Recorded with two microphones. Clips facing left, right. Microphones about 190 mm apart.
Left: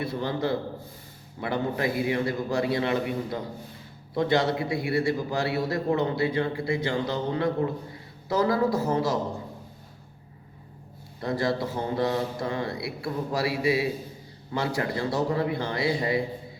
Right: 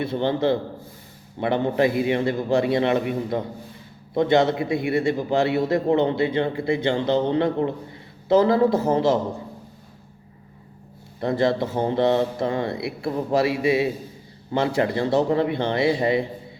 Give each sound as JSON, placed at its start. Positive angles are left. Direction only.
{"t": 0.0, "sound": "a man's voice", "side_deg": -25}
{"t": 11.2, "sound": "a man's voice", "side_deg": -25}